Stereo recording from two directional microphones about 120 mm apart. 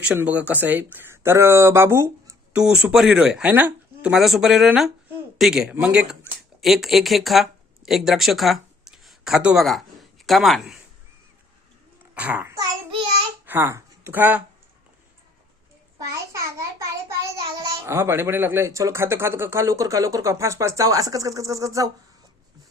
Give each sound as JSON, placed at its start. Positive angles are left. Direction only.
{"t": 0.0, "sound": "speech", "side_deg": -10}
{"t": 2.5, "sound": "speech", "side_deg": -5}
{"t": 12.1, "sound": "a child's voice", "side_deg": -15}
{"t": 16.0, "sound": "a sound", "side_deg": -25}
{"t": 17.6, "sound": "speech", "side_deg": -20}